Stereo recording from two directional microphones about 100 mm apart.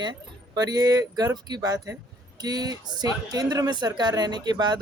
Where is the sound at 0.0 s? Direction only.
45° right (ahead or behind).